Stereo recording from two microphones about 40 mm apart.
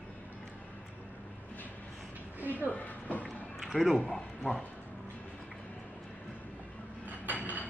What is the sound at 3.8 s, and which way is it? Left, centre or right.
Speech, centre.